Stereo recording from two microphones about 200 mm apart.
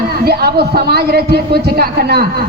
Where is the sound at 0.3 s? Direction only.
50° right (ahead or behind).